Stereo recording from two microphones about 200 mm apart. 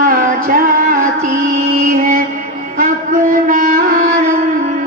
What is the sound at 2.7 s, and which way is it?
Music, 45° right (ahead or behind).